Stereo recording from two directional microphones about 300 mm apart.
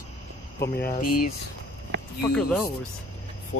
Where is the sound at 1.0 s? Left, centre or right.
Left.